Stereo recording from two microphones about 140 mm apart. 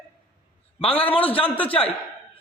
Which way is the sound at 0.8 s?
45° left (ahead or behind).